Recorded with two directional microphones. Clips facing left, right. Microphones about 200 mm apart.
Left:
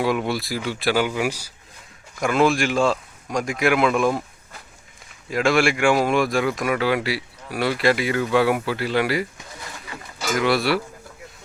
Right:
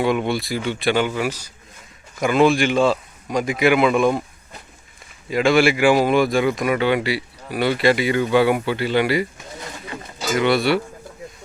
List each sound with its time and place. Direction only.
0.0 s speech: centre (ahead or behind)
2.1 s speech: centre (ahead or behind)
5.3 s speech: centre (ahead or behind)
9.6 s pigeon: 25° right (ahead or behind)
10.3 s speech: centre (ahead or behind)